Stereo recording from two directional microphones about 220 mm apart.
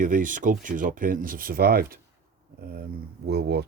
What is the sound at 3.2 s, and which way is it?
Speech, 50° right (ahead or behind).